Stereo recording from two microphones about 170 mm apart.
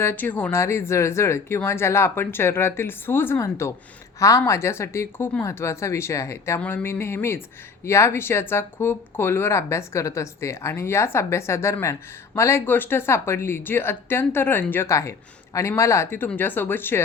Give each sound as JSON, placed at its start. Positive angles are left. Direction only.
{"t": 0.0, "sound": "speech", "side_deg": 10}